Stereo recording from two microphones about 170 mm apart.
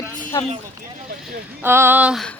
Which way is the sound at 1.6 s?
15° right (ahead or behind).